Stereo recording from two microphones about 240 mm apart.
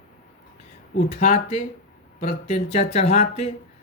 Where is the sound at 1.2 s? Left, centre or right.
Left.